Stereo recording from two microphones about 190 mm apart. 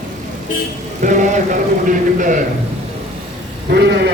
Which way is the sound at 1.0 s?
40° right (ahead or behind).